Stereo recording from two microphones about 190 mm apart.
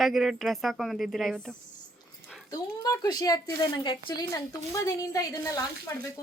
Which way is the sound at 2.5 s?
20° left (ahead or behind).